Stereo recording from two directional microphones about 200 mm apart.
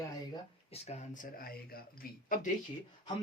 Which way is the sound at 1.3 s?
50° left (ahead or behind).